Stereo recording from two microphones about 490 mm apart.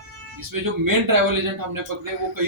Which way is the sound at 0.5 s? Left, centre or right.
Right.